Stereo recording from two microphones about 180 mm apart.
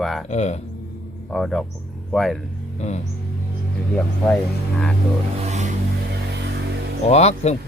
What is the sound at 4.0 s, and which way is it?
Speech, 10° left (ahead or behind).